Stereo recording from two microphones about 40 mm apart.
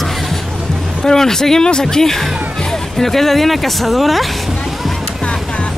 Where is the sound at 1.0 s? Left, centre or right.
Centre.